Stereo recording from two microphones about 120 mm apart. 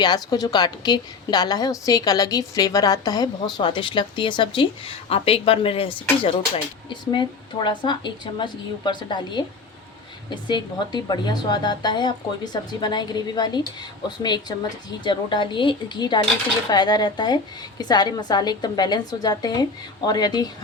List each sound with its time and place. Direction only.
0.0 s a woman's voice: 35° left (ahead or behind)